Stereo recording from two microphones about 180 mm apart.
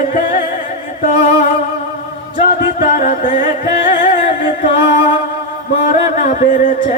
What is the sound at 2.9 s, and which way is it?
Music, 45° left (ahead or behind).